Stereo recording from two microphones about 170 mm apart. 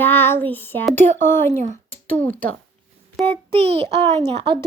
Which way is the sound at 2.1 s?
10° left (ahead or behind).